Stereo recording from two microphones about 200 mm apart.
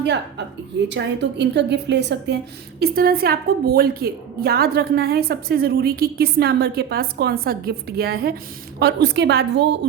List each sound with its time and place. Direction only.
0.0 s a woman's voice: 60° right (ahead or behind)